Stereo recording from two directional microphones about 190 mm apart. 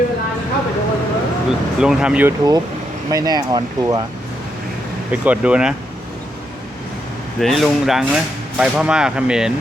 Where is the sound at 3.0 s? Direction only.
20° right (ahead or behind).